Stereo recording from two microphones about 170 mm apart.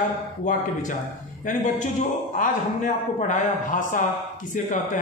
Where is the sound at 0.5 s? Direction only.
50° left (ahead or behind).